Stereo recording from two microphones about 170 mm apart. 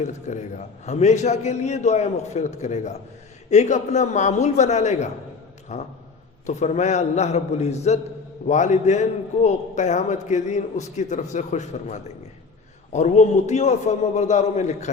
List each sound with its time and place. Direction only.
0.0 s a man's voice: 45° left (ahead or behind)